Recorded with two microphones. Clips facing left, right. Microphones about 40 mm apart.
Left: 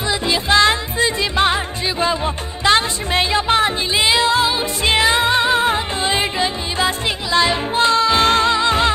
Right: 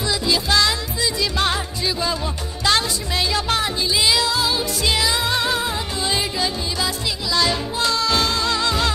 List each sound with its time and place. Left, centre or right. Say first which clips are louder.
0.1 s music: left 4 dB; left